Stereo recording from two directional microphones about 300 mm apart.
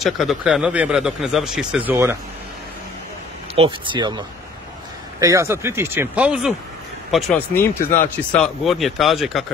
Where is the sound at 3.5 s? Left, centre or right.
Centre.